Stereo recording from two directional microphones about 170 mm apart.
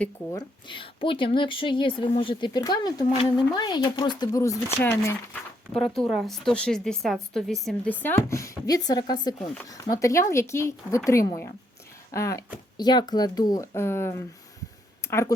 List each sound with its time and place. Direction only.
0.3 s a woman's voice: 25° left (ahead or behind)